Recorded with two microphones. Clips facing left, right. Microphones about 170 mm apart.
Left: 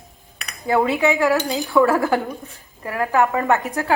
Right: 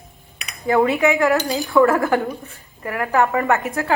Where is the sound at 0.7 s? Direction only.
15° left (ahead or behind).